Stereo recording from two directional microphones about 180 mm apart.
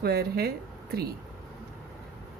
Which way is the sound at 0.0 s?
60° right (ahead or behind).